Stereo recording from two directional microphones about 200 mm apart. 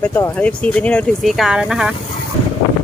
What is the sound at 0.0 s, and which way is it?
Speech, 10° left (ahead or behind).